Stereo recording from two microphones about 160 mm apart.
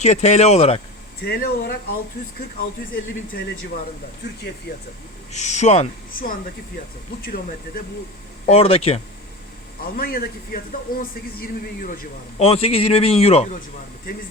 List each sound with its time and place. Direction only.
0.0 s speech: 45° left (ahead or behind)
1.2 s speech: 70° left (ahead or behind)
5.3 s speech: 45° left (ahead or behind)
7.2 s speech: 70° left (ahead or behind)
8.4 s a man's voice: 40° left (ahead or behind)
10.0 s speech: 65° left (ahead or behind)
12.4 s a man's voice: 35° left (ahead or behind)